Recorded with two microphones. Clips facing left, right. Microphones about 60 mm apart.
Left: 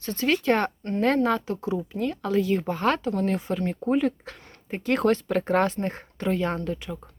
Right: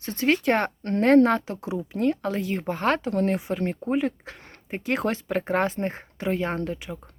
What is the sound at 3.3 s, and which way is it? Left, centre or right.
Speech, right.